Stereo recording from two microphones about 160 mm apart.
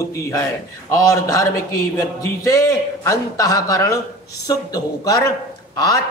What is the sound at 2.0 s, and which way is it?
A man's voice, 20° left (ahead or behind).